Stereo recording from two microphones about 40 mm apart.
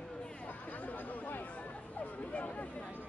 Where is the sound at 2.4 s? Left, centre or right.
Left.